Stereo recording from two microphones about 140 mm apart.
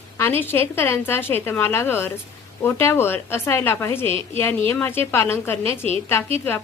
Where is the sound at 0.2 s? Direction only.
15° left (ahead or behind).